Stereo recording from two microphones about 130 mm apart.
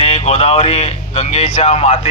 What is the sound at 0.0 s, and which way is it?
Speech, 55° left (ahead or behind).